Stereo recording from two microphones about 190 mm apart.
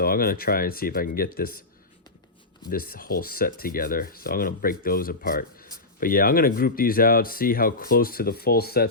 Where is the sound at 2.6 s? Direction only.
50° left (ahead or behind).